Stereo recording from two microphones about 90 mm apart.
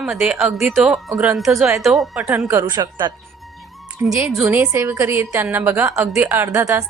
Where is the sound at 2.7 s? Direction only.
50° right (ahead or behind).